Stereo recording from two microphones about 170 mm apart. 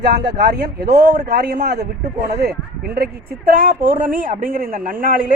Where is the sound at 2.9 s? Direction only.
65° right (ahead or behind).